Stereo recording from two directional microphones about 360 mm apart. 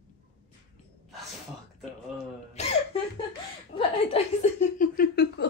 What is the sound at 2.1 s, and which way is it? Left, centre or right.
Throat clearing, centre.